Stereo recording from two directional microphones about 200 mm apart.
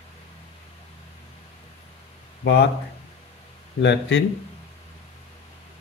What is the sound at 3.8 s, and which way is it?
Speech, 60° left (ahead or behind).